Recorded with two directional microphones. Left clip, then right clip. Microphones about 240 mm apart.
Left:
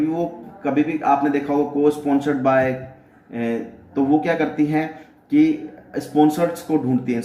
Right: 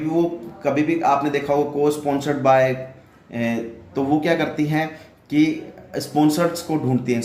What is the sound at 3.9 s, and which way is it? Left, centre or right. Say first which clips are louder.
Speech: left 1 dB; right.